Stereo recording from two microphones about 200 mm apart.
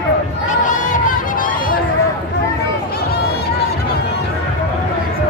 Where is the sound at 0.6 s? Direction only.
40° left (ahead or behind).